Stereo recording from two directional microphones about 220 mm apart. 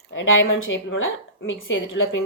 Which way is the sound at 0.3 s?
65° left (ahead or behind).